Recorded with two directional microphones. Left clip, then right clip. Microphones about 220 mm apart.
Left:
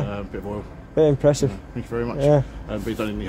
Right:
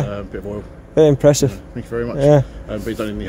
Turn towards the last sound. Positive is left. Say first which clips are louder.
# right 3 dB
turn(degrees=-10)  # may be behind; listen again after turning